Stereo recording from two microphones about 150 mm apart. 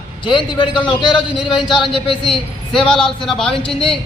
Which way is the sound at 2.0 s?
35° left (ahead or behind).